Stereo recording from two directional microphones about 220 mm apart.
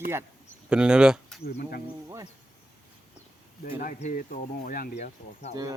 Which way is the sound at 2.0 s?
15° right (ahead or behind).